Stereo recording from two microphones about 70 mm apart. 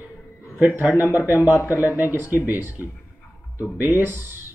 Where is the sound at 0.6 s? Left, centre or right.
Right.